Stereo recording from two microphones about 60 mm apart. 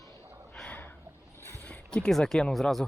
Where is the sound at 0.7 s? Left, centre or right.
Left.